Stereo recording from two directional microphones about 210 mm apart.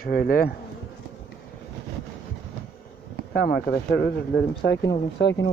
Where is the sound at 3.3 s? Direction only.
50° left (ahead or behind).